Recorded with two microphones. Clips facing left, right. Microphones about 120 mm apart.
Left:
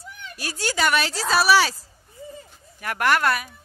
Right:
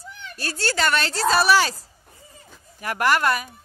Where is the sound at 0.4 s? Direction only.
15° left (ahead or behind).